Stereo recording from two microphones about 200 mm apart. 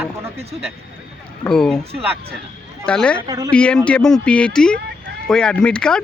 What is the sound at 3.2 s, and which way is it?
Speech, 20° right (ahead or behind).